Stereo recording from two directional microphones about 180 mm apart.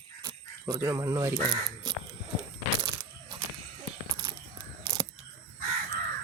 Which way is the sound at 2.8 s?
25° right (ahead or behind).